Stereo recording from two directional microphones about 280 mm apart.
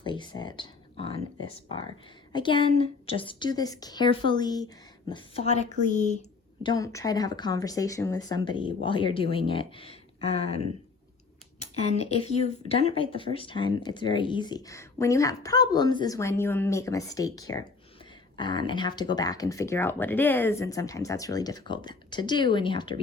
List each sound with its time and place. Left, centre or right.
0.0 s speech: centre
6.6 s speech: centre